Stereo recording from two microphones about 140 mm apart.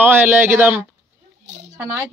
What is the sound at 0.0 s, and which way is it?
Speech, 15° right (ahead or behind).